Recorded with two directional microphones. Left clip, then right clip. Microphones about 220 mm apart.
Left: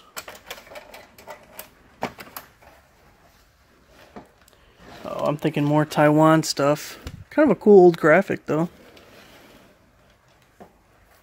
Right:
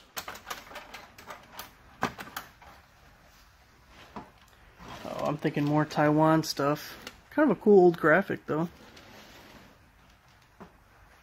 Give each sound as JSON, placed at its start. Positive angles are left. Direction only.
{"t": 2.0, "sound": "typewriter", "side_deg": 5}
{"t": 5.2, "sound": "speech", "side_deg": 40}